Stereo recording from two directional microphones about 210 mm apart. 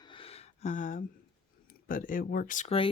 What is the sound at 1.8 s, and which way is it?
Speech, 40° left (ahead or behind).